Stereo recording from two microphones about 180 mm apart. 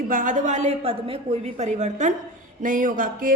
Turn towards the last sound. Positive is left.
turn(degrees=-50)  # may be behind; listen again after turning